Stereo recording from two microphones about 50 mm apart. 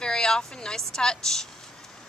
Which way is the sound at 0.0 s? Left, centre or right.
Centre.